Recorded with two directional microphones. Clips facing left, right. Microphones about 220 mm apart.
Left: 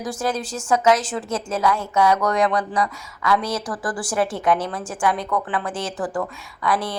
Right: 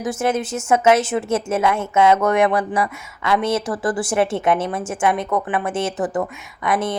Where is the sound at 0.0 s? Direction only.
20° right (ahead or behind).